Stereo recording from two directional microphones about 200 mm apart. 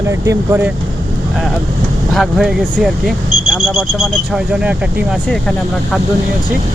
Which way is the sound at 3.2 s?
30° left (ahead or behind).